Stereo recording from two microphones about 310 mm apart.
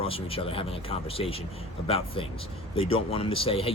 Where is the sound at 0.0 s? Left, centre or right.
Centre.